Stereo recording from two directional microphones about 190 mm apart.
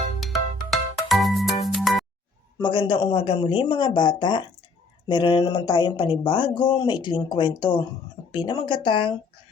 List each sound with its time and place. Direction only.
0.2 s music: centre (ahead or behind)
2.6 s speech: 25° left (ahead or behind)